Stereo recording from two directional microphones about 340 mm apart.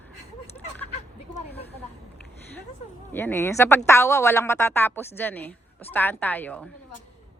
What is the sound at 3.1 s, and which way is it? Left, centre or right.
A woman's voice, centre.